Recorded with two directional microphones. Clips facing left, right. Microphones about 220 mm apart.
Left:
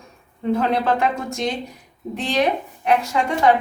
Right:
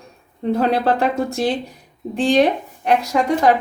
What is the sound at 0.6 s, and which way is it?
A woman's voice, 35° right (ahead or behind).